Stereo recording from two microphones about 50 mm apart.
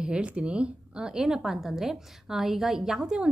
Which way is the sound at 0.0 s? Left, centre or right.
Centre.